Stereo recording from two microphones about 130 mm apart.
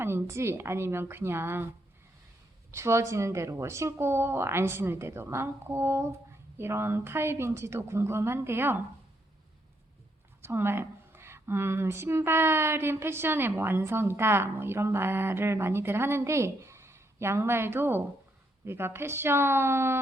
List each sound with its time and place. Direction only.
0.0 s speech: 20° right (ahead or behind)
2.7 s speech: 20° right (ahead or behind)
10.4 s speech: 20° right (ahead or behind)